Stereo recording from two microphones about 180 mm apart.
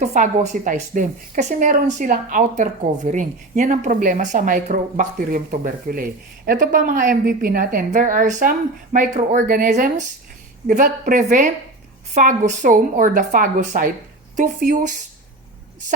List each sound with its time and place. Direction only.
0.0 s a woman's voice: 45° right (ahead or behind)